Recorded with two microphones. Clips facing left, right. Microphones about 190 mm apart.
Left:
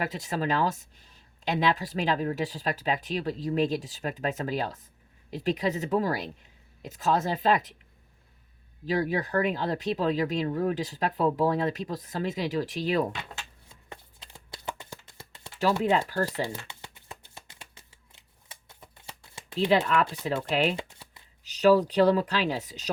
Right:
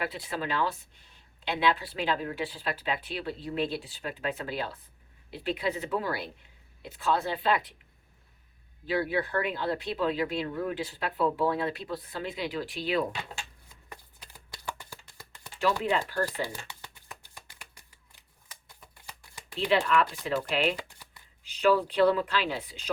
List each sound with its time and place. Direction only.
0.0 s speech: 40° left (ahead or behind)
8.9 s speech: 40° left (ahead or behind)
13.9 s a sound: 25° left (ahead or behind)
15.8 s speech: 40° left (ahead or behind)
16.4 s shuffling cards: 25° left (ahead or behind)
20.5 s speech: 40° left (ahead or behind)
20.7 s shuffling cards: 25° left (ahead or behind)
21.4 s speech: 40° left (ahead or behind)